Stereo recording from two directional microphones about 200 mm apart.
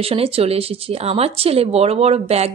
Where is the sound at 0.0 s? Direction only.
30° right (ahead or behind).